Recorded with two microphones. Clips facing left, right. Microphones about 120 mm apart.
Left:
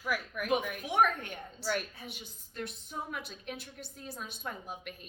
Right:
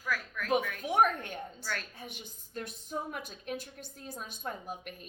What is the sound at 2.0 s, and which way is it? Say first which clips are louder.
A woman's voice: right 1 dB; 45° right (ahead or behind).